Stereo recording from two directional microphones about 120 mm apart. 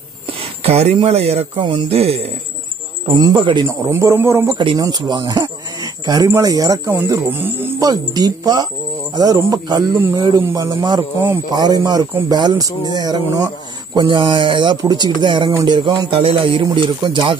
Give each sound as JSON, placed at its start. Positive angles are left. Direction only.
{"t": 0.3, "sound": "speech", "side_deg": -55}
{"t": 3.1, "sound": "speech", "side_deg": -35}
{"t": 3.6, "sound": "speech", "side_deg": -25}
{"t": 4.6, "sound": "speech", "side_deg": -35}
{"t": 7.8, "sound": "speech", "side_deg": -30}
{"t": 13.9, "sound": "speech", "side_deg": -40}
{"t": 16.2, "sound": "speech", "side_deg": -50}